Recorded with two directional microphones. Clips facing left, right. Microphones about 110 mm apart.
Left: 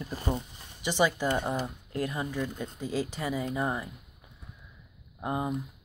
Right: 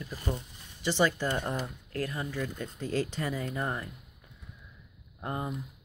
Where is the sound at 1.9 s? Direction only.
20° left (ahead or behind).